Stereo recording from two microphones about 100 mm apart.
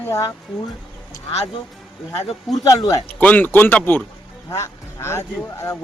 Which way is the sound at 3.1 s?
15° left (ahead or behind).